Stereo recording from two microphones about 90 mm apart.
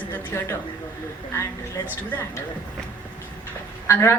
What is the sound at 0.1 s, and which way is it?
Speech, 20° left (ahead or behind).